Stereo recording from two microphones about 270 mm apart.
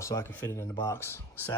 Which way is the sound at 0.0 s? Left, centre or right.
Centre.